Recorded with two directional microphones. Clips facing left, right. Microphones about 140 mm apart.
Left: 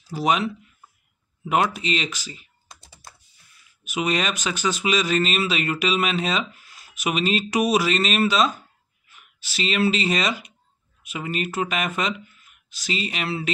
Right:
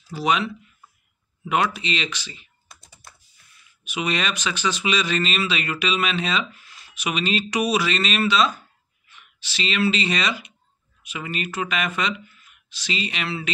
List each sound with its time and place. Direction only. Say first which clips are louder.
0.2 s speech: left 1 dB; 40° left (ahead or behind)
2.7 s computer keyboard: left 2 dB; 25° left (ahead or behind)
3.8 s speech: left 2 dB; 40° left (ahead or behind)